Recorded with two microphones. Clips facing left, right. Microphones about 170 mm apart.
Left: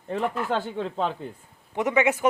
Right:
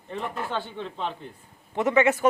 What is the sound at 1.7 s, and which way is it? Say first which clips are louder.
Speech: right 1 dB; 15° left (ahead or behind).